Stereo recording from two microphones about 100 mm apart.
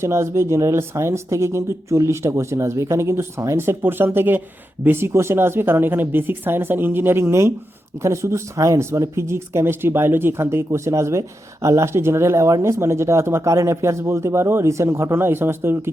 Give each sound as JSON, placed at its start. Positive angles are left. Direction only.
{"t": 0.0, "sound": "speech", "side_deg": -25}